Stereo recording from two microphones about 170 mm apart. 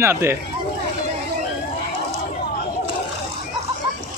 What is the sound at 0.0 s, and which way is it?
Speech, 15° right (ahead or behind).